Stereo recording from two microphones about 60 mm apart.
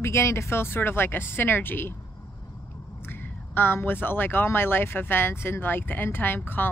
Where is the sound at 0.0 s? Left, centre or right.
Left.